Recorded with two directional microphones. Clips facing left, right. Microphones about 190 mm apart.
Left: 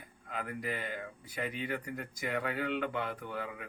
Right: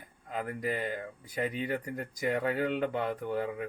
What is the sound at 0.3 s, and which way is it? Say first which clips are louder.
Speech: right 4 dB; 40° right (ahead or behind).